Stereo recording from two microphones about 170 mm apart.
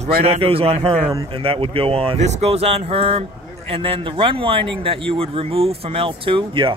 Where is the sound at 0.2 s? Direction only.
35° right (ahead or behind).